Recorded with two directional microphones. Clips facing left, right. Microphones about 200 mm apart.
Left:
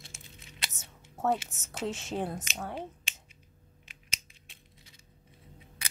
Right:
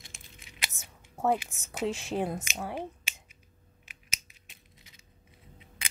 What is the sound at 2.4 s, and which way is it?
Finger snapping, 10° right (ahead or behind).